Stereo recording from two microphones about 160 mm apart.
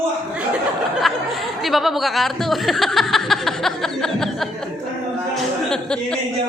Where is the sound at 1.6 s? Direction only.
Centre (ahead or behind).